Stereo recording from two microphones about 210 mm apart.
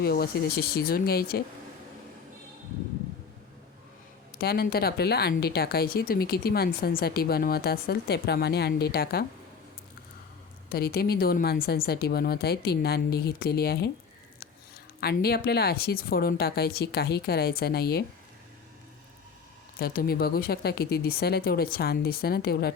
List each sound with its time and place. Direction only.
0.0 s speech: 50° left (ahead or behind)
4.4 s speech: 45° left (ahead or behind)
10.7 s speech: 45° left (ahead or behind)
15.0 s speech: 45° left (ahead or behind)
19.8 s speech: 45° left (ahead or behind)